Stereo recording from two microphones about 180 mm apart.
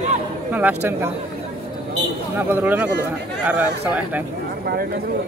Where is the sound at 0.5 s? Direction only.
10° right (ahead or behind).